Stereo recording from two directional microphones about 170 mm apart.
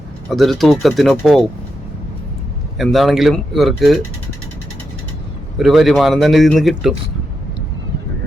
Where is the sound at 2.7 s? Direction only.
Centre (ahead or behind).